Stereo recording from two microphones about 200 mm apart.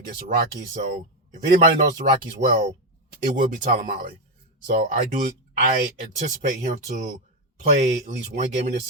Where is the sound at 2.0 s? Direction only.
45° right (ahead or behind).